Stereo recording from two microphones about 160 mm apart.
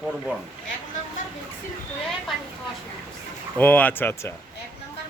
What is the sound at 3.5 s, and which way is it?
Speech, 10° left (ahead or behind).